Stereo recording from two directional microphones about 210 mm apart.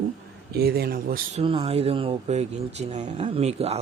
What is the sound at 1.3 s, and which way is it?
A man's voice, 25° right (ahead or behind).